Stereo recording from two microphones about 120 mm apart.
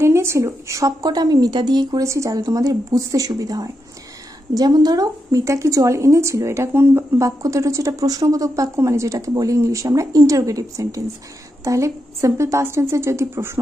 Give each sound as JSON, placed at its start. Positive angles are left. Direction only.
{"t": 0.0, "sound": "a woman's voice", "side_deg": -20}